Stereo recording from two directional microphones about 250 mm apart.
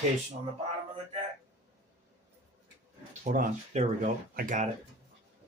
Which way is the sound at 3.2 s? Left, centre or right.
Right.